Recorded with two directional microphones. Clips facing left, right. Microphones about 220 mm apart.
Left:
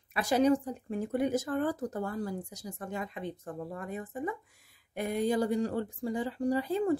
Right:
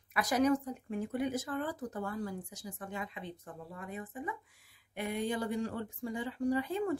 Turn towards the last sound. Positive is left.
turn(degrees=35)  # may be behind; listen again after turning